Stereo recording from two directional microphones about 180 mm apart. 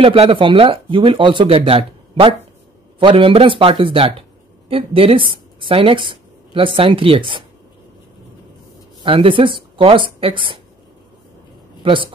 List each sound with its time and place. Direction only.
0.0 s speech: 30° right (ahead or behind)
9.0 s speech: 30° right (ahead or behind)
11.8 s speech: 30° right (ahead or behind)